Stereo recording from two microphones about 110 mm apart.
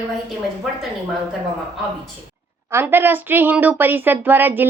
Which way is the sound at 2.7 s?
20° right (ahead or behind).